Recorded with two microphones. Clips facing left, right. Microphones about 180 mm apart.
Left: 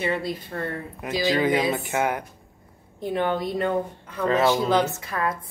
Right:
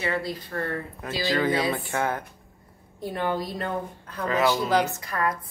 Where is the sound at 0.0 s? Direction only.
20° left (ahead or behind).